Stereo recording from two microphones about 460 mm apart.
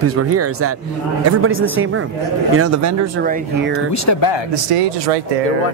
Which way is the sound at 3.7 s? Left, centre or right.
Left.